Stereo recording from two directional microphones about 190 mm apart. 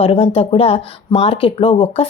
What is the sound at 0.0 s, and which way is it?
Speech, 30° left (ahead or behind).